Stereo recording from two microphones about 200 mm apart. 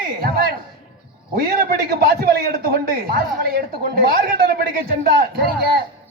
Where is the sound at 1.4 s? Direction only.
50° right (ahead or behind).